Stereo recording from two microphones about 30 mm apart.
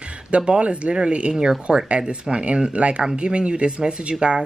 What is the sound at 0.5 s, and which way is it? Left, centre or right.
Speech, right.